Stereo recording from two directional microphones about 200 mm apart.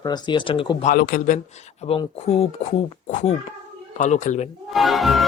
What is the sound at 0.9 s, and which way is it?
Speech, 45° left (ahead or behind).